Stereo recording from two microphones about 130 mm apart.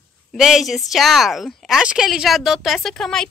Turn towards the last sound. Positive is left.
turn(degrees=5)  # may be behind; listen again after turning